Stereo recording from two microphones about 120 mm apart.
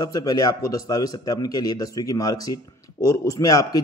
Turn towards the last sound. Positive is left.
turn(degrees=30)  # may be behind; listen again after turning